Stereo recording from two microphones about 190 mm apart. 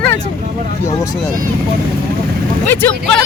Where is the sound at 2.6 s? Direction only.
10° left (ahead or behind).